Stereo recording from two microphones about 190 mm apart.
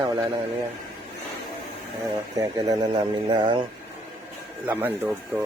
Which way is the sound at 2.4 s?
20° right (ahead or behind).